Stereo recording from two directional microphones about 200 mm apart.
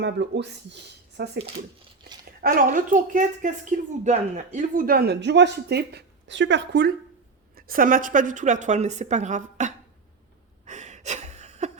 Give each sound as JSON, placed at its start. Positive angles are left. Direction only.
{"t": 0.0, "sound": "speech", "side_deg": -60}
{"t": 1.4, "sound": "speech", "side_deg": -25}
{"t": 2.4, "sound": "speech", "side_deg": -45}
{"t": 7.5, "sound": "a woman's voice", "side_deg": -45}
{"t": 10.7, "sound": "gasp", "side_deg": -35}